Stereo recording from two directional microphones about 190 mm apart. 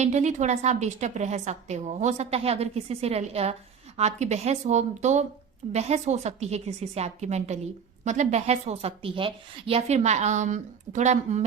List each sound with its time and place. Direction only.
0.0 s a woman's voice: 35° right (ahead or behind)